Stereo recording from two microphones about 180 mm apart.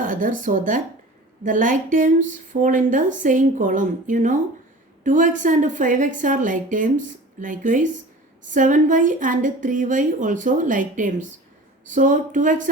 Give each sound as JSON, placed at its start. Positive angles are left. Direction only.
{"t": 0.0, "sound": "a woman's voice", "side_deg": -50}